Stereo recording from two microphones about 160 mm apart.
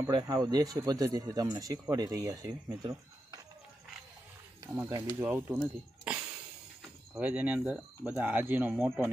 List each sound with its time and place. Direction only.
0.1 s speech: 25° right (ahead or behind)
4.7 s speech: 20° right (ahead or behind)
7.2 s speech: 10° right (ahead or behind)